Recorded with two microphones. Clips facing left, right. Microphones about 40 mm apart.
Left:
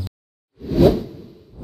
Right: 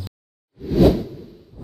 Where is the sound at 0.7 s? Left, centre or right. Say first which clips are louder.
Left 1 dB; centre.